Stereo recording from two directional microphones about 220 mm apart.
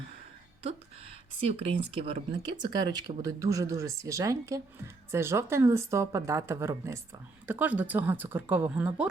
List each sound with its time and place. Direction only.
0.6 s speech: 25° right (ahead or behind); by 8.9 s 10° right (ahead or behind)